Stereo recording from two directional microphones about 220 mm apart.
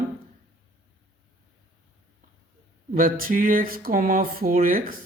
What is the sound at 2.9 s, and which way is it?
A woman's voice, 40° right (ahead or behind).